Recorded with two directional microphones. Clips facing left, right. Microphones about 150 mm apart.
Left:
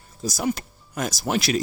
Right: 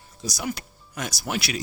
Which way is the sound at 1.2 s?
40° left (ahead or behind).